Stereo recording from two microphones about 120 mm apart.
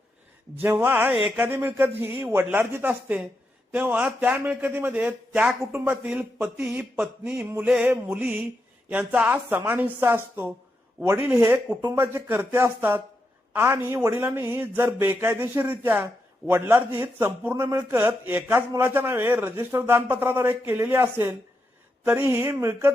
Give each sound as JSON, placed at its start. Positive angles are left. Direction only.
{"t": 0.6, "sound": "a man's voice", "side_deg": -20}
{"t": 7.7, "sound": "a man's voice", "side_deg": -5}